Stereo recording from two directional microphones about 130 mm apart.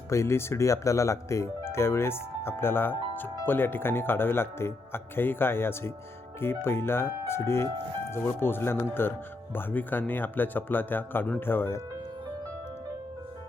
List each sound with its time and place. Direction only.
0.1 s speech: 20° left (ahead or behind)